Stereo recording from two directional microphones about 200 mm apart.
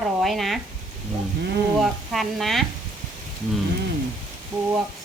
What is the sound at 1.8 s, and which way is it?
Speech, centre (ahead or behind).